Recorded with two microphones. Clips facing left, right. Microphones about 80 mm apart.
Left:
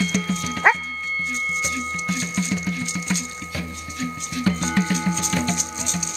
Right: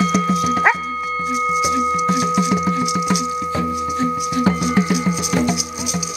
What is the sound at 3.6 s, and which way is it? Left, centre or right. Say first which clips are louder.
Tuning fork: right 9 dB; right.